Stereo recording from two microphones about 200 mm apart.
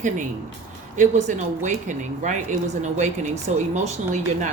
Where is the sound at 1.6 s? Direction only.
40° right (ahead or behind).